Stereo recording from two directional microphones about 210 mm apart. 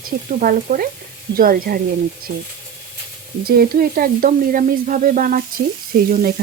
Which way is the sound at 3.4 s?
45° right (ahead or behind).